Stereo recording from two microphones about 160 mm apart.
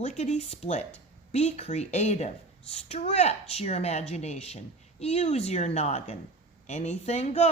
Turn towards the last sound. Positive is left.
turn(degrees=40)  # may be behind; listen again after turning